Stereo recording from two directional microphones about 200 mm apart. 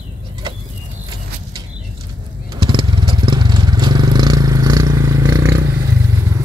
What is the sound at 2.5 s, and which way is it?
Vehicle, 25° right (ahead or behind).